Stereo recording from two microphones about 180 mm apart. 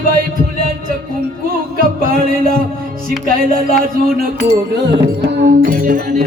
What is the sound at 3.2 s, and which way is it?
Music, 55° right (ahead or behind).